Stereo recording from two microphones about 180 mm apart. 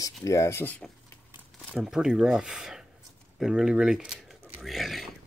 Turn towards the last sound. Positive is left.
turn(degrees=0)  # may be behind; listen again after turning